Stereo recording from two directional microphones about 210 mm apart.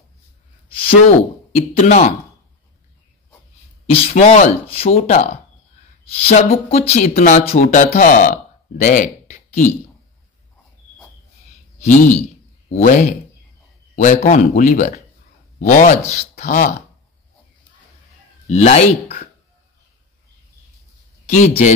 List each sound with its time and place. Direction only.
0.7 s a sound: 25° left (ahead or behind)
1.5 s speech: 35° left (ahead or behind)
3.9 s speech: 30° left (ahead or behind)
12.2 s a sound: 30° left (ahead or behind)
13.9 s speech: 35° left (ahead or behind)
18.5 s speech: 30° left (ahead or behind)
21.3 s speech: 35° left (ahead or behind)